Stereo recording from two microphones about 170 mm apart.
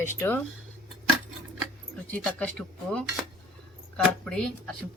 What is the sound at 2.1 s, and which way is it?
Speech, 10° left (ahead or behind).